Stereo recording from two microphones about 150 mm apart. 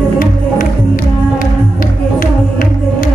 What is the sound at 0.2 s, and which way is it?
Music, 65° left (ahead or behind).